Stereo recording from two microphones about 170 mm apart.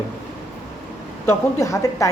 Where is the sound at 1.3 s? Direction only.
20° left (ahead or behind).